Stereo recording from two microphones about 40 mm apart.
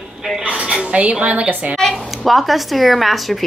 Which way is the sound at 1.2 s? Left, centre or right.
Right.